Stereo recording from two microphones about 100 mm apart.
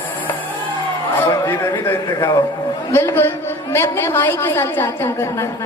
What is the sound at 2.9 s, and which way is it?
A woman's voice, 25° left (ahead or behind).